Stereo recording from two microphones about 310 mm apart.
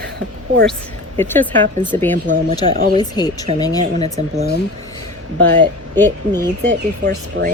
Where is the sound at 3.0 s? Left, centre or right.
Centre.